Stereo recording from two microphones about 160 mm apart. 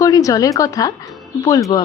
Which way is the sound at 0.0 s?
20° left (ahead or behind).